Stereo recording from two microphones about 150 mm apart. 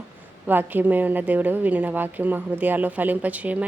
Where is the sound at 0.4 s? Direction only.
10° right (ahead or behind).